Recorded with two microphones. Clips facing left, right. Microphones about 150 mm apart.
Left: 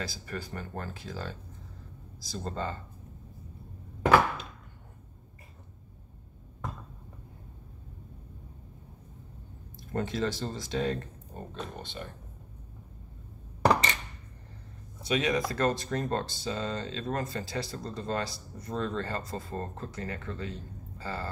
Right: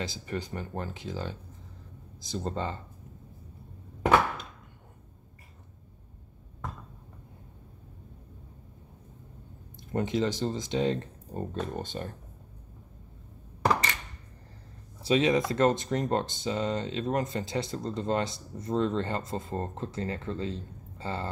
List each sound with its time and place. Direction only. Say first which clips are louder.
0.0 s speech: right 3 dB; 20° right (ahead or behind)
9.8 s speech: right 3 dB; 20° right (ahead or behind)
11.3 s speech: right 7 dB; 45° right (ahead or behind)
15.0 s speech: right 4 dB; 25° right (ahead or behind)